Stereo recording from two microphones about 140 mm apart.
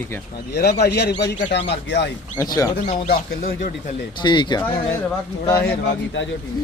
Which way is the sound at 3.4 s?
65° left (ahead or behind).